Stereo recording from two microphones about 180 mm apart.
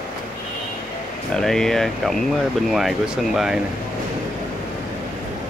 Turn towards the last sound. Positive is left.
turn(degrees=-5)  # may be behind; listen again after turning